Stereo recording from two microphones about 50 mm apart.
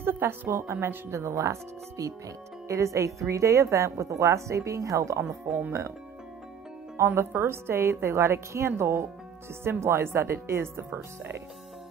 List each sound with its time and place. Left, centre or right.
0.0 s music: right
0.5 s a woman's voice: right
1.1 s a woman's voice: right
2.7 s a woman's voice: right
5.7 s a woman's voice: right
7.2 s a woman's voice: right